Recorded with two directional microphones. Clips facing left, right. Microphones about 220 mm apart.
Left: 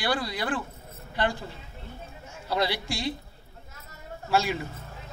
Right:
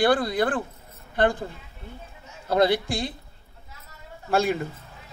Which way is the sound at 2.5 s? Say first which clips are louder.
Right 7 dB; 50° right (ahead or behind).